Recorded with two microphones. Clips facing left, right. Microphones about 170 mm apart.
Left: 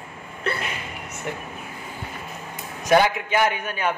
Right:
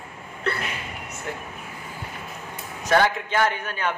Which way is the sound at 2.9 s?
15° left (ahead or behind).